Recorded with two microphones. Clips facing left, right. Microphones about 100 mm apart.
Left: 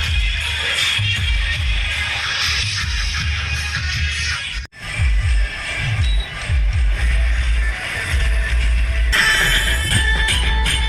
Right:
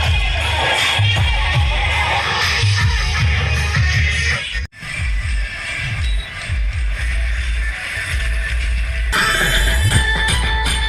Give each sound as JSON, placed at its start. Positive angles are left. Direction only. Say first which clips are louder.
{"t": 0.0, "sound": "music", "louder": "right 6 dB", "side_deg": -65}
{"t": 9.1, "sound": "music", "louder": "right 1 dB", "side_deg": -15}